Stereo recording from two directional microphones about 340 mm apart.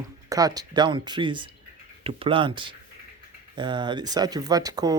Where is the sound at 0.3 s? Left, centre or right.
Centre.